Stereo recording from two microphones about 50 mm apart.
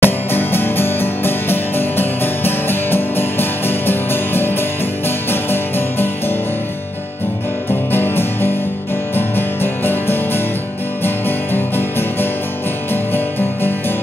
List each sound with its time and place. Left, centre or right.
0.0 s music: left
7.9 s music: left